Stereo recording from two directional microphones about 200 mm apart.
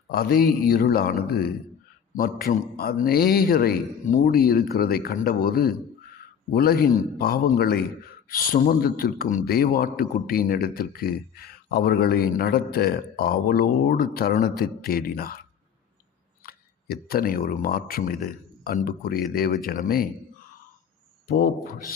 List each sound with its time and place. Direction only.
0.1 s a man's voice: 50° left (ahead or behind)
16.4 s a man's voice: 50° left (ahead or behind)
21.2 s a man's voice: 45° left (ahead or behind)